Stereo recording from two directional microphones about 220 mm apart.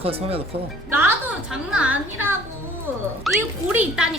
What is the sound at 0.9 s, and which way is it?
A woman's voice, 10° right (ahead or behind).